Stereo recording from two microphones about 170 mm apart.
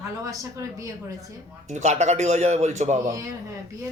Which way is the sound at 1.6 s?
45° right (ahead or behind).